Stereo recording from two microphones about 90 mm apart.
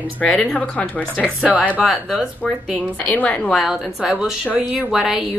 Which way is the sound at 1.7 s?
5° right (ahead or behind).